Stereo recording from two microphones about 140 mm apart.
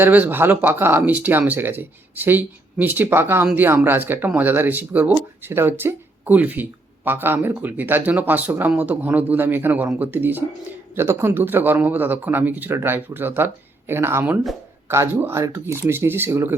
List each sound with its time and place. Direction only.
0.0 s speech: 15° right (ahead or behind)